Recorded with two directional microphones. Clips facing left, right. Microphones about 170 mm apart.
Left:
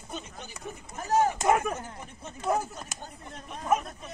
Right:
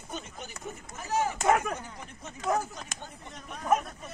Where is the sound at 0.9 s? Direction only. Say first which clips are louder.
Left 5 dB; 40° left (ahead or behind).